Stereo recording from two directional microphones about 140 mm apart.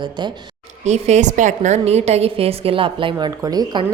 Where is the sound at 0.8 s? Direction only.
55° right (ahead or behind).